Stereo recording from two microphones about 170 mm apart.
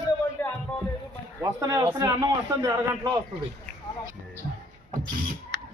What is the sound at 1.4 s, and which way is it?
A man's voice, 20° right (ahead or behind).